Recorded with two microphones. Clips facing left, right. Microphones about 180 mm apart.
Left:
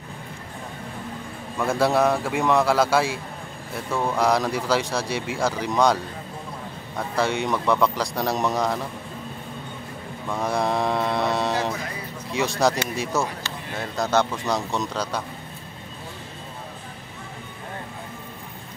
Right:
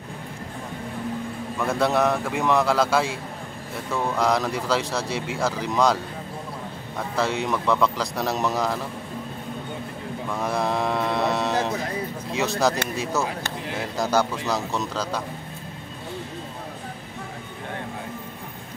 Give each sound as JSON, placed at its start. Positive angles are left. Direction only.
{"t": 1.6, "sound": "speech", "side_deg": 0}
{"t": 7.0, "sound": "speech", "side_deg": 0}
{"t": 10.3, "sound": "speech", "side_deg": 0}